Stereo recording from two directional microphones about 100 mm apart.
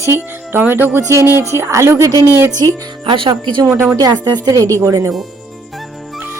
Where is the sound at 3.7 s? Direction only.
20° right (ahead or behind).